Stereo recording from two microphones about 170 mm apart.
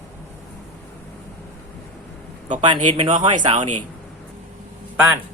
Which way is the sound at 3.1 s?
50° right (ahead or behind).